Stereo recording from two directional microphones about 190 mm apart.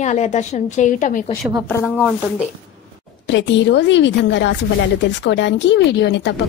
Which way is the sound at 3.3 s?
70° left (ahead or behind).